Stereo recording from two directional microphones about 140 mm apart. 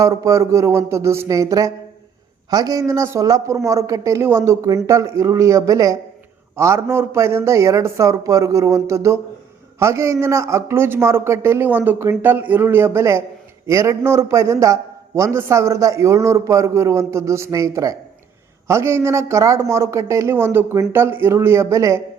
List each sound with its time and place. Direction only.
0.0 s a man's voice: 25° right (ahead or behind)